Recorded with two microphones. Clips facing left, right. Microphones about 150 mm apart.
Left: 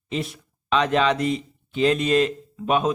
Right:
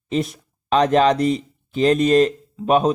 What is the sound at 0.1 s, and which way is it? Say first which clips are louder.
A man's voice: right 6 dB; 40° right (ahead or behind).